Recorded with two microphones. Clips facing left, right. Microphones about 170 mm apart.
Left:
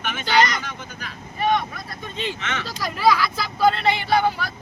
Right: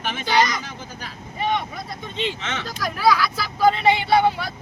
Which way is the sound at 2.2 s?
25° right (ahead or behind).